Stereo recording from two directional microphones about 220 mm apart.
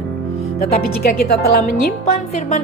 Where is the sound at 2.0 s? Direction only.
30° left (ahead or behind).